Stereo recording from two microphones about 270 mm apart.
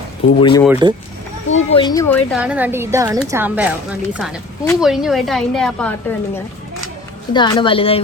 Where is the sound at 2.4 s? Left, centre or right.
Centre.